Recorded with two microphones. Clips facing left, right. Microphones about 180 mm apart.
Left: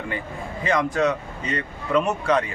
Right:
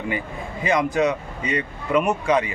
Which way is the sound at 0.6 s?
15° right (ahead or behind).